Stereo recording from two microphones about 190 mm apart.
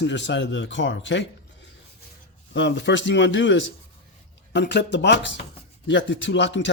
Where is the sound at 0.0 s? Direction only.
70° left (ahead or behind).